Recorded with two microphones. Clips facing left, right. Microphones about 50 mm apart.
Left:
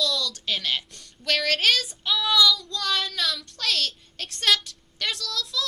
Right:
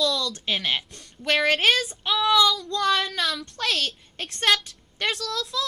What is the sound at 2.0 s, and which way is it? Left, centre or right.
Speech, right.